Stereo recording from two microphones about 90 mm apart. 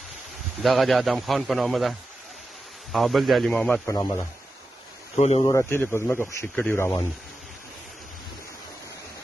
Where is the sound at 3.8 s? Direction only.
40° left (ahead or behind).